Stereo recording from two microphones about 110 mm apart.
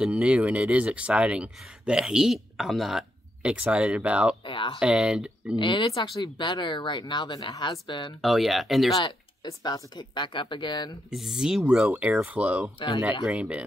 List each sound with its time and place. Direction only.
0.0 s speech: 10° right (ahead or behind)
4.5 s speech: 50° left (ahead or behind)
4.7 s speech: 5° right (ahead or behind)
5.6 s speech: 45° left (ahead or behind)
8.2 s speech: centre (ahead or behind)
8.9 s speech: 40° left (ahead or behind)
11.1 s speech: 5° right (ahead or behind)
12.7 s speech: 45° left (ahead or behind)
13.2 s speech: 10° right (ahead or behind)